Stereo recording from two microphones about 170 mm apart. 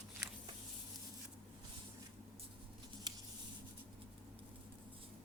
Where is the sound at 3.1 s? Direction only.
25° right (ahead or behind).